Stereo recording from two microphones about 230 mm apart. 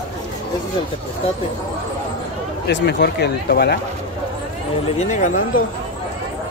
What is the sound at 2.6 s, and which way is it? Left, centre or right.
Speech, left.